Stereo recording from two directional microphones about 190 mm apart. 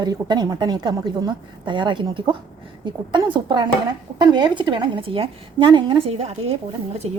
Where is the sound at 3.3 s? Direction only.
25° right (ahead or behind).